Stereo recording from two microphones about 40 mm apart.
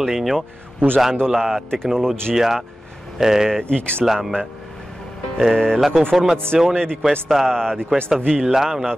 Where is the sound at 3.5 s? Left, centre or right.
Centre.